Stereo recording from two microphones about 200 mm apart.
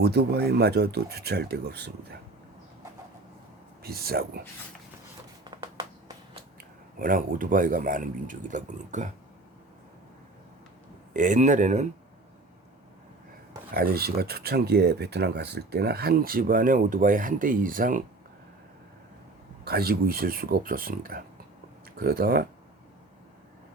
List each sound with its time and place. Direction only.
0.0 s speech: 55° right (ahead or behind)
3.8 s speech: 50° right (ahead or behind)
6.6 s speech: 45° right (ahead or behind)
11.1 s speech: 40° right (ahead or behind)
13.7 s speech: 50° right (ahead or behind)
19.6 s speech: 50° right (ahead or behind)